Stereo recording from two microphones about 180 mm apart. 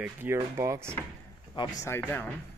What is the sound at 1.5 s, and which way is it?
Speech, 20° left (ahead or behind).